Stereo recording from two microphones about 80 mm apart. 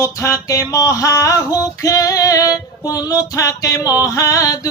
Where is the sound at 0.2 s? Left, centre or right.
Left.